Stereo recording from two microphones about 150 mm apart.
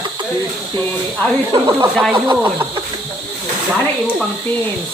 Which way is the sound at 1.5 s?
25° right (ahead or behind).